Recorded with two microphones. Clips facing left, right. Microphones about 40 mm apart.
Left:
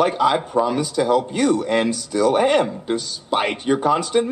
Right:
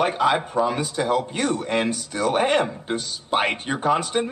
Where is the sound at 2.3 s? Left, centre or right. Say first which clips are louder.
Left 3 dB; right.